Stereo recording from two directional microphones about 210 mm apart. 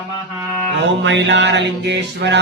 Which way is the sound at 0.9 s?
55° right (ahead or behind).